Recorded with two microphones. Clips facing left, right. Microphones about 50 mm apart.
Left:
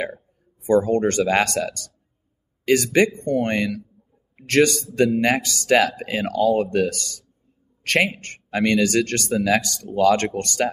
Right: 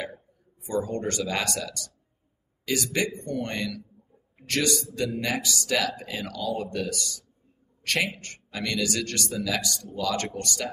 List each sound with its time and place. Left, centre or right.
0.7 s a man's voice: left